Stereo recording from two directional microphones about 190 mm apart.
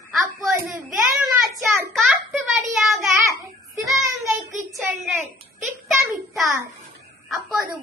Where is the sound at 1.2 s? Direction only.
Centre (ahead or behind).